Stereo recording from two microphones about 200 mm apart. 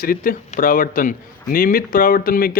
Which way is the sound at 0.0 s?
45° left (ahead or behind).